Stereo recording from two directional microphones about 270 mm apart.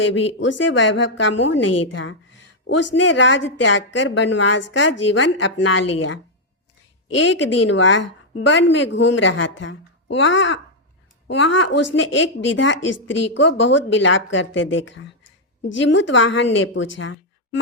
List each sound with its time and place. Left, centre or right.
0.0 s a woman's voice: left
7.2 s a woman's voice: left
17.0 s a sound: left